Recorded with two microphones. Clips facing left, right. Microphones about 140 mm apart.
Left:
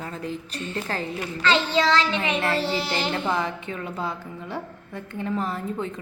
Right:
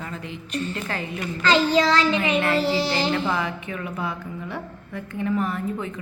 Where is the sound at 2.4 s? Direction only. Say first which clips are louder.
Right 3 dB; 30° left (ahead or behind).